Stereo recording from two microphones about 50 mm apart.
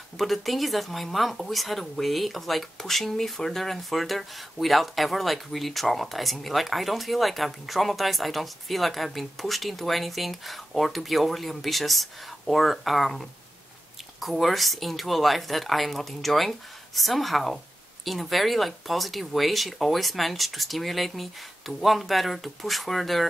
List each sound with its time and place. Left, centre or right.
0.2 s speech: centre